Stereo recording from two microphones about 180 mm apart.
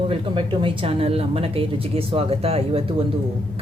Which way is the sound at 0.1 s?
30° right (ahead or behind).